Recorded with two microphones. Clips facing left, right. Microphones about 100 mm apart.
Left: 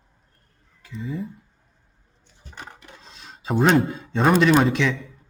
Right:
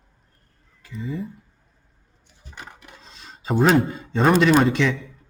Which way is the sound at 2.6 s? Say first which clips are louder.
Even; 5° right (ahead or behind).